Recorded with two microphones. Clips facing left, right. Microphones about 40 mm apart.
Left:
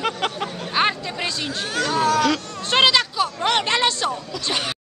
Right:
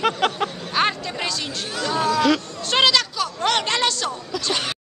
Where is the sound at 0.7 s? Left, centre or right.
Centre.